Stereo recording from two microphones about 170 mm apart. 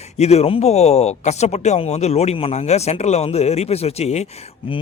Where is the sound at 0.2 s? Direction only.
40° left (ahead or behind).